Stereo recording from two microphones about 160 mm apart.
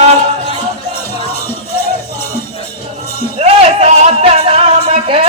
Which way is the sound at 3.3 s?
40° right (ahead or behind).